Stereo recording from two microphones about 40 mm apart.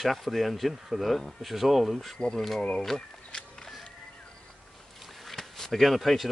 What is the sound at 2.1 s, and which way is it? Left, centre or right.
Speech, centre.